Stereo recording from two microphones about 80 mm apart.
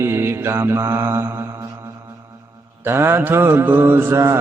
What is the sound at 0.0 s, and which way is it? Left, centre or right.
Mantra, right.